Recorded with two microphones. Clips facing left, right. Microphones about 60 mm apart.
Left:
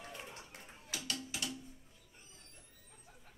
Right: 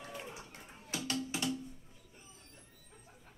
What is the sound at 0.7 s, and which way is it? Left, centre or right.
Music, right.